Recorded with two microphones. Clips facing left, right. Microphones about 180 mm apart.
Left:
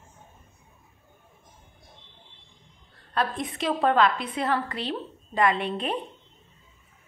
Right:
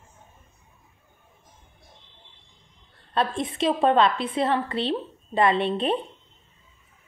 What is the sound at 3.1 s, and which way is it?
A woman's voice, 25° right (ahead or behind).